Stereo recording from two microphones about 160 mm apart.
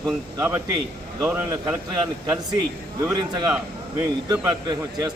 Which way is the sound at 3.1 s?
25° right (ahead or behind).